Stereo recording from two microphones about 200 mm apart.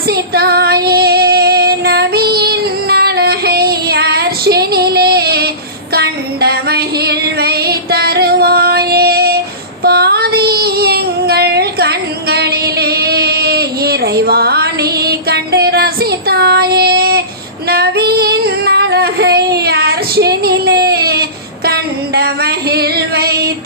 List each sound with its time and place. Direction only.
0.1 s female singing: 50° right (ahead or behind)
5.9 s child singing: 50° right (ahead or behind)
17.7 s female singing: 50° right (ahead or behind)